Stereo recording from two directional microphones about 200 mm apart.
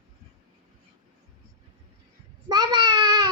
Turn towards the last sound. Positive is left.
turn(degrees=-20)  # may be behind; listen again after turning